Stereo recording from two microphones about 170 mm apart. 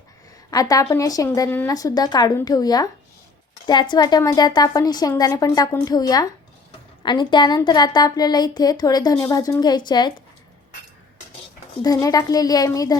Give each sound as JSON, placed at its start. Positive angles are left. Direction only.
{"t": 0.5, "sound": "a woman's voice", "side_deg": 20}
{"t": 11.8, "sound": "a woman's voice", "side_deg": 20}